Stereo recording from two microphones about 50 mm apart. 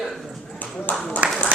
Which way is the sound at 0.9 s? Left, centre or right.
Left.